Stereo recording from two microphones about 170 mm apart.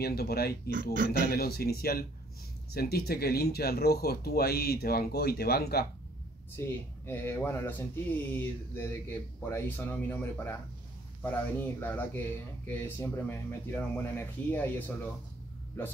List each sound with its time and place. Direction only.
0.0 s speech: 65° left (ahead or behind)
0.9 s speech: 50° right (ahead or behind)
1.2 s speech: 65° left (ahead or behind)
7.1 s speech: 15° left (ahead or behind)